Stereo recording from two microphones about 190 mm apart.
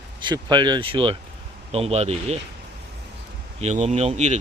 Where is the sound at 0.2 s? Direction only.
25° right (ahead or behind).